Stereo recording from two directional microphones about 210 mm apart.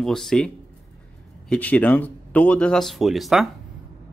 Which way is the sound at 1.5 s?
5° left (ahead or behind).